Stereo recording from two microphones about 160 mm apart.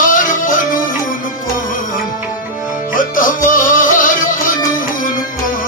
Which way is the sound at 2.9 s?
60° left (ahead or behind).